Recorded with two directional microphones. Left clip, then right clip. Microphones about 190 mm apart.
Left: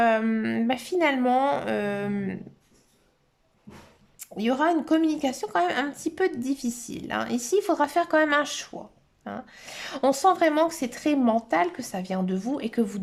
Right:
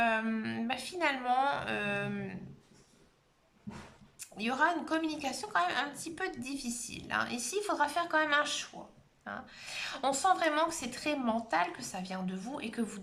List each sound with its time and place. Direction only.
0.0 s speech: 35° left (ahead or behind)
4.2 s speech: 35° left (ahead or behind)